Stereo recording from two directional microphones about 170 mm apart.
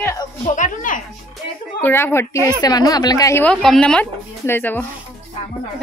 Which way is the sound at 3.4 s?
5° left (ahead or behind).